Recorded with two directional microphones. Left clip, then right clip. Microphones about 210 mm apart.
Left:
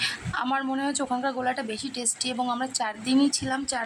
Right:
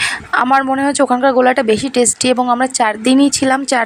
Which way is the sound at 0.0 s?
40° right (ahead or behind).